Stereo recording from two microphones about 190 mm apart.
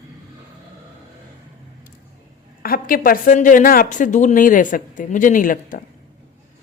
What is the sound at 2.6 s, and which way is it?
A woman's voice, 50° left (ahead or behind).